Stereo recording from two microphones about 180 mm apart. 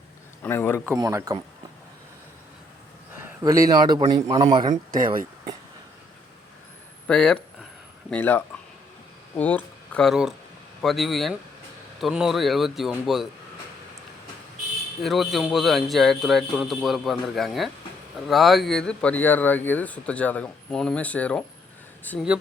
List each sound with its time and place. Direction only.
0.4 s speech: 10° left (ahead or behind)
0.9 s speech: 20° right (ahead or behind)
3.2 s a man's voice: 15° right (ahead or behind)
4.7 s speech: 50° right (ahead or behind)
7.1 s speech: 5° left (ahead or behind)
15.0 s speech: centre (ahead or behind)